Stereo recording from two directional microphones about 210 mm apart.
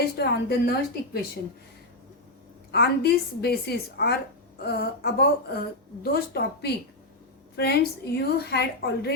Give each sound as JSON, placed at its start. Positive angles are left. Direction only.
{"t": 0.0, "sound": "a woman's voice", "side_deg": 50}
{"t": 2.7, "sound": "a woman's voice", "side_deg": 50}